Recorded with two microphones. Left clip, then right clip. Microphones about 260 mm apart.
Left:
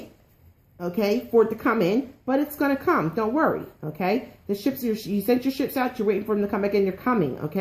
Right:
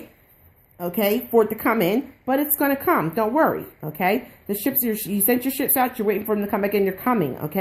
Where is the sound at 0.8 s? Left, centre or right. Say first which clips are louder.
Right 2 dB; right.